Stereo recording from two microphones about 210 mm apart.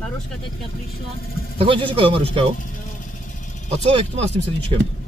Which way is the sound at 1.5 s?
25° right (ahead or behind).